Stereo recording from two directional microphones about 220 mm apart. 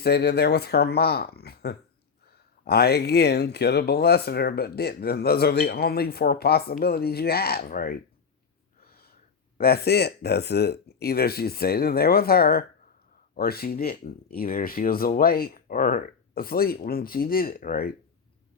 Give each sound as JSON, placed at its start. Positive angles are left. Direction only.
{"t": 0.0, "sound": "speech", "side_deg": 45}
{"t": 8.8, "sound": "gasp", "side_deg": 45}
{"t": 9.6, "sound": "speech", "side_deg": 45}